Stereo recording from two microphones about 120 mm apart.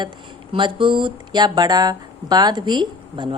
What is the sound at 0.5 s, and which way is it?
A woman's voice, 40° right (ahead or behind).